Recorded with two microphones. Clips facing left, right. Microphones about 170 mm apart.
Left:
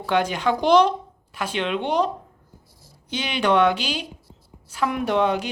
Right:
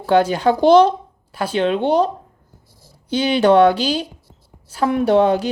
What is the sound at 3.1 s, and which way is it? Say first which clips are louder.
Speech: right 8 dB; 35° right (ahead or behind).